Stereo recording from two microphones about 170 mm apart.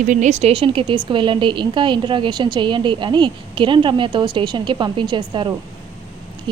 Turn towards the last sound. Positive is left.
turn(degrees=-25)  # may be behind; listen again after turning